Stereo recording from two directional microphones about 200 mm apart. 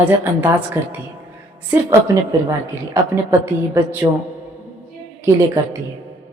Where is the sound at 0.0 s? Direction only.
10° right (ahead or behind).